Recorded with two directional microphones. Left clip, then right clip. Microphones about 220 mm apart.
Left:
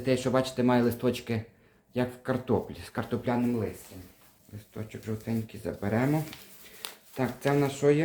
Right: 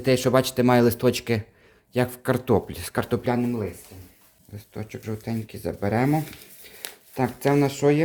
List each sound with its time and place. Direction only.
0.0 s speech: 55° right (ahead or behind)
4.7 s speech: 45° right (ahead or behind)
7.2 s speech: 45° right (ahead or behind)